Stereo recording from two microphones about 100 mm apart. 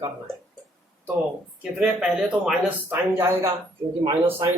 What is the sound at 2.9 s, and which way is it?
Speech, 20° right (ahead or behind).